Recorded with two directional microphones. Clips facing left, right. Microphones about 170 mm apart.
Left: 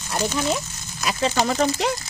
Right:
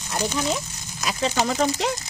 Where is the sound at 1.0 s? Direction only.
65° left (ahead or behind).